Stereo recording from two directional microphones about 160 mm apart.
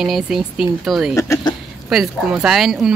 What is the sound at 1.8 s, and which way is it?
Speech, 5° right (ahead or behind).